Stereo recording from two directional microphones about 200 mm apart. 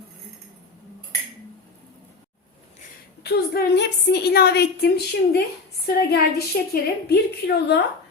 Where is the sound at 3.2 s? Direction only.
50° left (ahead or behind).